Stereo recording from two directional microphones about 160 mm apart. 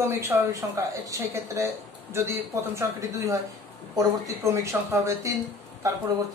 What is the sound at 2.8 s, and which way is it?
A woman's voice, 20° right (ahead or behind).